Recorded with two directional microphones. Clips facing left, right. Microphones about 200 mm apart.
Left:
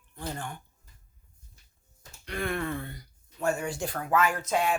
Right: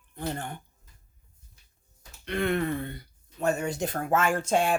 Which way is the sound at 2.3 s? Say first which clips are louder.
Right 4 dB; 25° right (ahead or behind).